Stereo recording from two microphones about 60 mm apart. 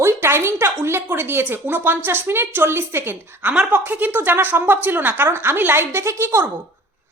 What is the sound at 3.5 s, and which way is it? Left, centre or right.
A woman's voice, right.